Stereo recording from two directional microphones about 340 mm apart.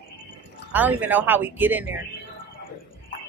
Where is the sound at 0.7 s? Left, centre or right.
Centre.